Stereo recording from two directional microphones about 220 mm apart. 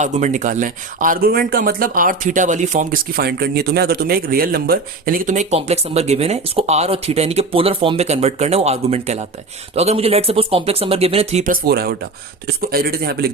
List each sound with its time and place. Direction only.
0.0 s speech: 35° right (ahead or behind)